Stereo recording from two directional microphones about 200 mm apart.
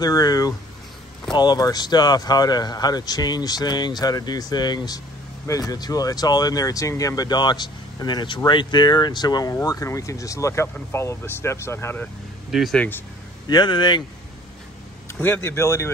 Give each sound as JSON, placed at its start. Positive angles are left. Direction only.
{"t": 0.0, "sound": "speech", "side_deg": 20}
{"t": 12.4, "sound": "speech", "side_deg": 0}
{"t": 13.5, "sound": "speech", "side_deg": 20}
{"t": 15.0, "sound": "speech", "side_deg": 10}